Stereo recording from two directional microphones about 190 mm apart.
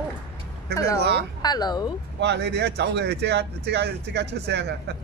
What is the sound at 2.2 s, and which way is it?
Speech, 60° right (ahead or behind).